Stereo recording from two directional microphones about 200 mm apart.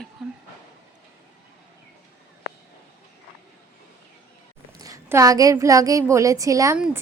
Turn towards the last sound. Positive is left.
turn(degrees=-15)  # may be behind; listen again after turning